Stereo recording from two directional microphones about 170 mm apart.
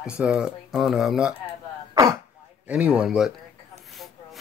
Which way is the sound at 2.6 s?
5° right (ahead or behind).